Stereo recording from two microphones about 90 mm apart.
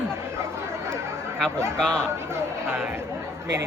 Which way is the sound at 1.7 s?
10° left (ahead or behind).